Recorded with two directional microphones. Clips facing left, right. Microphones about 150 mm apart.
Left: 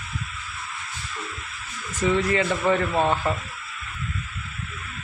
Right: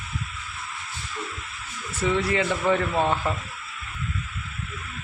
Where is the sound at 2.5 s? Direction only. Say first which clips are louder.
Left 1 dB; 10° left (ahead or behind).